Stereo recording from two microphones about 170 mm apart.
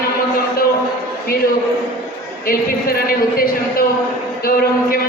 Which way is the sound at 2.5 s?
60° left (ahead or behind).